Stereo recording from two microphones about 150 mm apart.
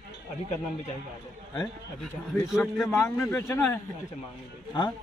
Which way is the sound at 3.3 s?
20° left (ahead or behind).